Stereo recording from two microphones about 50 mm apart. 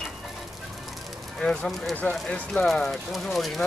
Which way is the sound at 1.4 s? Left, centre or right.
Centre.